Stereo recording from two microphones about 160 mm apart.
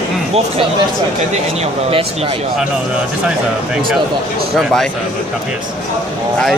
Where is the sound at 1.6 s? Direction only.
35° right (ahead or behind).